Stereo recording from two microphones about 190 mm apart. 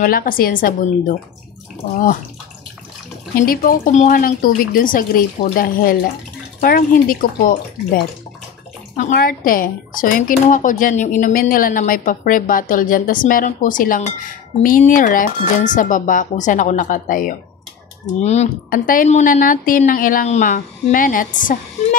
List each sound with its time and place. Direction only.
0.0 s speech: 50° left (ahead or behind)
3.4 s speech: 50° left (ahead or behind)